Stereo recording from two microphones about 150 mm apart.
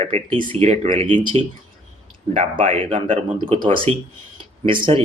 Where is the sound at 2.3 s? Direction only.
45° right (ahead or behind).